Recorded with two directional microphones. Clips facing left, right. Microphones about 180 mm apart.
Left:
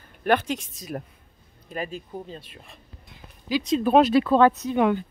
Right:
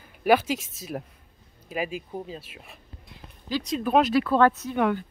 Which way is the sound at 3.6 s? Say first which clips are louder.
Left 4 dB; 30° left (ahead or behind).